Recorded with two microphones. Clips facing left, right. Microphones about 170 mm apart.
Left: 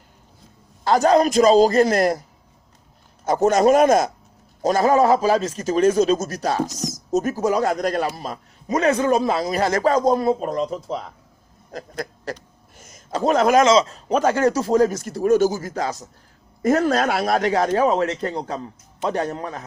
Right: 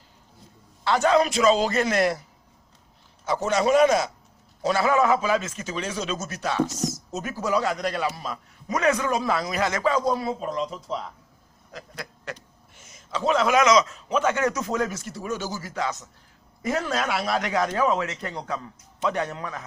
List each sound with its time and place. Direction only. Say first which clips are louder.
0.9 s speech: left 4 dB; 40° left (ahead or behind)
3.2 s speech: left 7 dB; 45° left (ahead or behind)
8.6 s a man's voice: left 5 dB; 30° left (ahead or behind); by 11.0 s 45° left (ahead or behind)
11.7 s a sound: left 8 dB; 40° left (ahead or behind)
13.7 s speech: left 4 dB; 30° left (ahead or behind)
17.5 s speech: left 3 dB; 35° left (ahead or behind)